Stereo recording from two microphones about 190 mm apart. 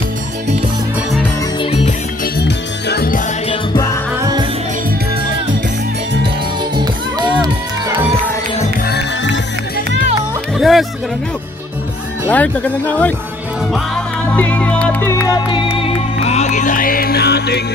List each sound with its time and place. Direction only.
2.3 s music: 55° left (ahead or behind)
3.4 s music: 20° left (ahead or behind)
6.8 s music: 20° right (ahead or behind)
8.9 s music: 70° left (ahead or behind)
10.6 s music: centre (ahead or behind)
12.3 s speech: 10° left (ahead or behind)
14.3 s music: 10° left (ahead or behind); by 17.6 s 60° left (ahead or behind)